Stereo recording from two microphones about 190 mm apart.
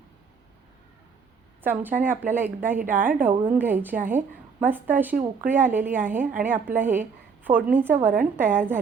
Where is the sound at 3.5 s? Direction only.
10° right (ahead or behind).